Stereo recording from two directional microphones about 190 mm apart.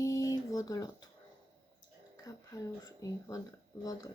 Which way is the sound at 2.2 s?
15° left (ahead or behind).